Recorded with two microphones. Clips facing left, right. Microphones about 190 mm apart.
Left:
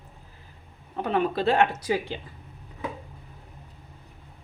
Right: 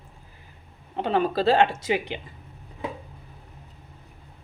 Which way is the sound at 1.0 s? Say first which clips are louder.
Right 2 dB; 30° right (ahead or behind).